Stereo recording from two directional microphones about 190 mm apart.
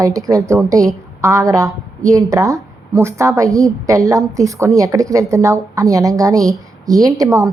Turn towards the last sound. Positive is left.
turn(degrees=-15)  # may be behind; listen again after turning